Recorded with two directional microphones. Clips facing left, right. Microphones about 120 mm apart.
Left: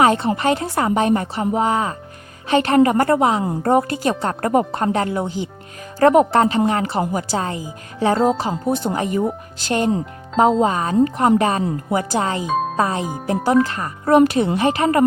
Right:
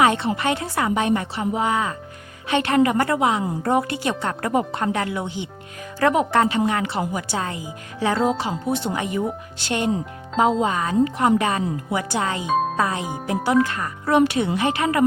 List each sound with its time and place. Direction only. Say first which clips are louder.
0.0 s speech: left 3 dB; 35° left (ahead or behind)
10.6 s speech: left 3 dB; 35° left (ahead or behind)
12.5 s speech: even; centre (ahead or behind)
12.7 s speech: left 3 dB; 35° left (ahead or behind)
14.0 s speech: left 5 dB; 45° left (ahead or behind)